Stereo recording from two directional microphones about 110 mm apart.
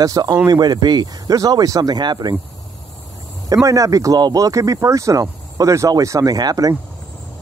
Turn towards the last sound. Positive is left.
turn(degrees=-35)  # may be behind; listen again after turning